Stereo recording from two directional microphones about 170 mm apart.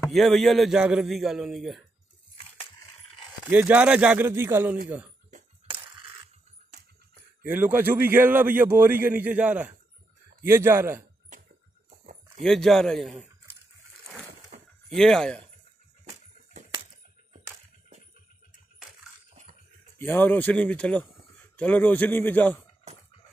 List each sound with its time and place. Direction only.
0.1 s a man's voice: centre (ahead or behind)
3.4 s a man's voice: 10° right (ahead or behind)
7.4 s a man's voice: 10° right (ahead or behind)
12.4 s a man's voice: centre (ahead or behind)
14.5 s a sound: 45° right (ahead or behind)
15.0 s a man's voice: 5° left (ahead or behind)
20.0 s speech: 10° left (ahead or behind)